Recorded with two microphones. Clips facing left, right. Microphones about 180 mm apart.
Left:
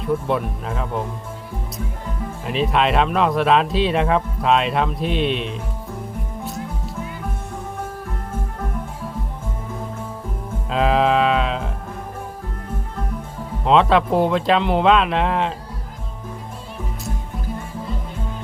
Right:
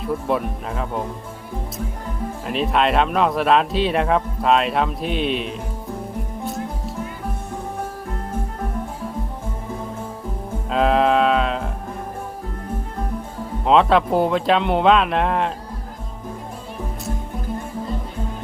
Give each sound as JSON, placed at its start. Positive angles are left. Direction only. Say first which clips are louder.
{"t": 0.0, "sound": "speech", "louder": "left 1 dB", "side_deg": 0}
{"t": 2.5, "sound": "speech", "louder": "even", "side_deg": 0}
{"t": 10.7, "sound": "music", "louder": "right 1 dB", "side_deg": 0}
{"t": 13.7, "sound": "speech", "louder": "even", "side_deg": 0}